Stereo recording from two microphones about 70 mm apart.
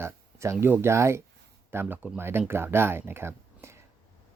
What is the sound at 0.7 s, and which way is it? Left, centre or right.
Speech, right.